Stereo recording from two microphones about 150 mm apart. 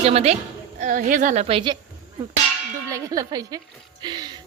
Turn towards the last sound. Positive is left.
turn(degrees=-30)  # may be behind; listen again after turning